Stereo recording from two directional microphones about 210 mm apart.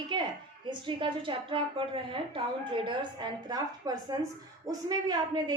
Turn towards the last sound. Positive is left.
turn(degrees=-20)  # may be behind; listen again after turning